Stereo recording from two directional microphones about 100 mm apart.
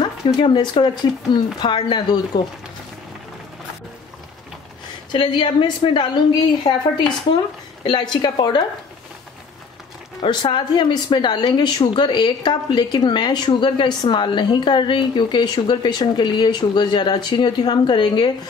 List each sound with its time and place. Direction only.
0.0 s speech: 50° left (ahead or behind)
5.1 s speech: 55° left (ahead or behind)
7.8 s speech: 50° left (ahead or behind)
10.2 s speech: 50° left (ahead or behind)